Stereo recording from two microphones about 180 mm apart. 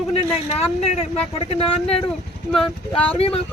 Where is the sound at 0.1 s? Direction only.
35° left (ahead or behind).